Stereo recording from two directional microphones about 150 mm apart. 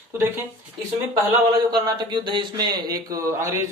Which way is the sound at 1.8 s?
30° right (ahead or behind).